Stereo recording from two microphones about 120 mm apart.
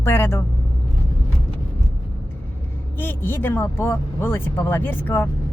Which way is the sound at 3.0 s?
20° left (ahead or behind).